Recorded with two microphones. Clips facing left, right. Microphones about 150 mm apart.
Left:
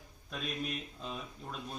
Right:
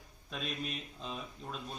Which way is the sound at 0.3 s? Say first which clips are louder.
Left 1 dB; centre (ahead or behind).